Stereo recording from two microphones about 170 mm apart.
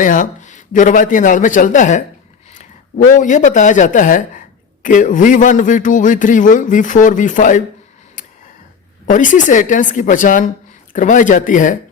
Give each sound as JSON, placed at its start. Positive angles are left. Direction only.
{"t": 0.0, "sound": "a man's voice", "side_deg": 50}
{"t": 3.1, "sound": "a man's voice", "side_deg": 50}
{"t": 8.2, "sound": "a sound", "side_deg": 50}
{"t": 9.0, "sound": "a man's voice", "side_deg": 50}